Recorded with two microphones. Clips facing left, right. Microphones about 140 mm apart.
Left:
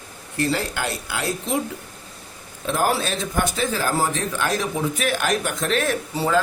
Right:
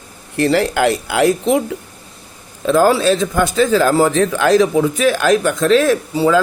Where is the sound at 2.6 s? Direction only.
90° right.